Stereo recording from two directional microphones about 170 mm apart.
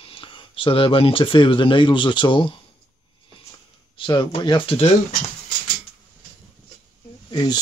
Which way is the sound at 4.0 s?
25° left (ahead or behind).